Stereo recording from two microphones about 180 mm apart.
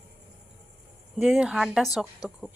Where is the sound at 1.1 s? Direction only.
Centre (ahead or behind).